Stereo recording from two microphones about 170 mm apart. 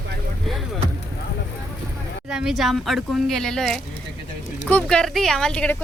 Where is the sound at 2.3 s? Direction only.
5° right (ahead or behind).